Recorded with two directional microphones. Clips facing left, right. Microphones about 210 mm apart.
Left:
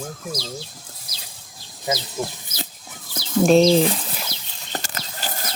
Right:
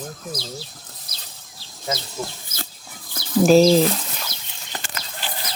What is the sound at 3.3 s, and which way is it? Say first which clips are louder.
Speech: right 1 dB; centre (ahead or behind).